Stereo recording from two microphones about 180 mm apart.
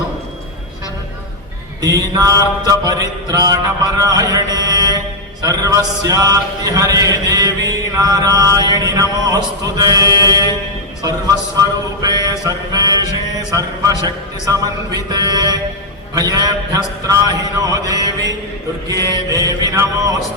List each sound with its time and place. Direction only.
1.8 s music: 20° right (ahead or behind)
12.0 s music: 20° right (ahead or behind)
12.5 s speech: 20° right (ahead or behind)
14.4 s music: 20° right (ahead or behind)